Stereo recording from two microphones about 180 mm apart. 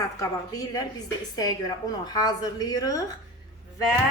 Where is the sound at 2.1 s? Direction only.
20° left (ahead or behind).